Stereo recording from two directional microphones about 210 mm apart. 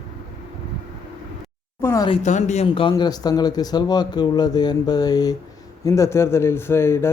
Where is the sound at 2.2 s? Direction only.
35° left (ahead or behind); by 7.1 s 10° left (ahead or behind).